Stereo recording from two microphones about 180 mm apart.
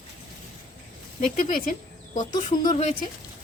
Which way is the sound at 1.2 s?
50° left (ahead or behind).